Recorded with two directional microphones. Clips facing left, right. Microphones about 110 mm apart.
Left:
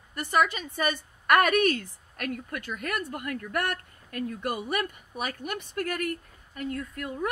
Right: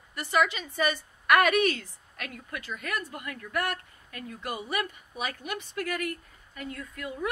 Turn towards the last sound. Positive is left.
turn(degrees=50)  # may be behind; listen again after turning